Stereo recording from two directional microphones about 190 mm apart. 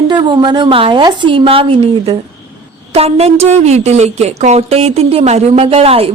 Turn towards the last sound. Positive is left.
turn(degrees=-30)  # may be behind; listen again after turning